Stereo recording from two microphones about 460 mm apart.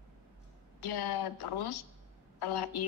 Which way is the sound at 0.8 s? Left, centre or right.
Left.